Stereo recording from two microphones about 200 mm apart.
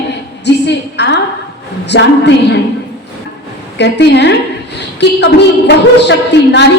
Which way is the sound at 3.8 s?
55° left (ahead or behind).